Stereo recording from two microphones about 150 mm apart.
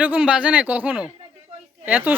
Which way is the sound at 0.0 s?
10° right (ahead or behind).